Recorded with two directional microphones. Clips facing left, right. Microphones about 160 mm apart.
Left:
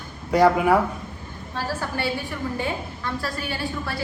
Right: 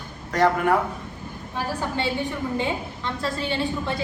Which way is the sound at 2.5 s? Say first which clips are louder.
Right 2 dB; 20° right (ahead or behind).